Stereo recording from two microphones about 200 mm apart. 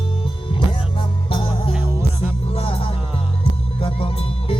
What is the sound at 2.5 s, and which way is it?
Music, 30° left (ahead or behind).